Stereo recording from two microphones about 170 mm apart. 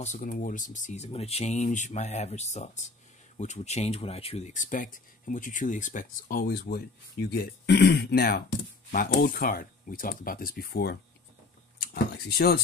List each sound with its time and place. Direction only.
0.0 s speech: 45° left (ahead or behind); by 8.5 s 70° left (ahead or behind)
8.9 s speech: 55° left (ahead or behind)